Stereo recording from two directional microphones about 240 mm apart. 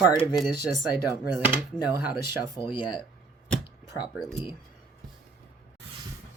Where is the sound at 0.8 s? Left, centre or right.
Centre.